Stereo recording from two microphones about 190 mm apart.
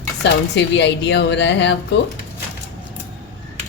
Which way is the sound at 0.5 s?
65° left (ahead or behind).